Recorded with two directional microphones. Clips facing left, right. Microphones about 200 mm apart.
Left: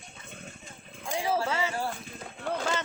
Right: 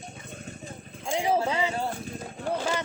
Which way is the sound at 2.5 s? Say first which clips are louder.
Right 2 dB; 10° right (ahead or behind).